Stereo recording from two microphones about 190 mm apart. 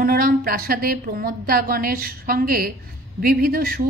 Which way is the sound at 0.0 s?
50° right (ahead or behind).